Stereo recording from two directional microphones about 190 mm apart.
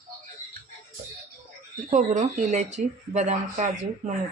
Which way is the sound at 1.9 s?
40° right (ahead or behind).